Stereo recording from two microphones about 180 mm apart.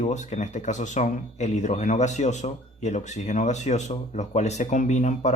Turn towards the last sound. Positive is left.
turn(degrees=40)  # may be behind; listen again after turning